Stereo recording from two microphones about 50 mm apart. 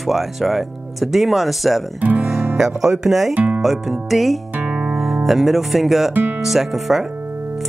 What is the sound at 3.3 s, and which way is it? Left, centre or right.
Speech, right.